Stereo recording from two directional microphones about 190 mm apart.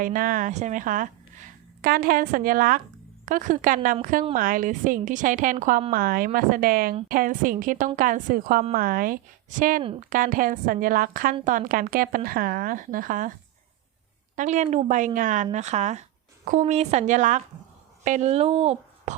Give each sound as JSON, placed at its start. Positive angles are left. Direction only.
{"t": 0.0, "sound": "speech", "side_deg": -45}
{"t": 14.3, "sound": "speech", "side_deg": -40}